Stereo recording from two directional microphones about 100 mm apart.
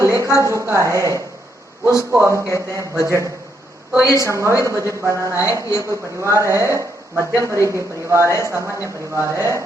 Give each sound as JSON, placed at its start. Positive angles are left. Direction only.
{"t": 0.0, "sound": "speech", "side_deg": -30}
{"t": 4.0, "sound": "a woman's voice", "side_deg": 30}
{"t": 4.3, "sound": "speech", "side_deg": -30}